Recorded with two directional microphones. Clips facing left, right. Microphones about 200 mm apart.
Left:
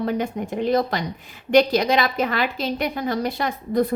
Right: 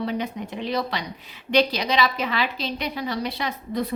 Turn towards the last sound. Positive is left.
turn(degrees=50)  # may be behind; listen again after turning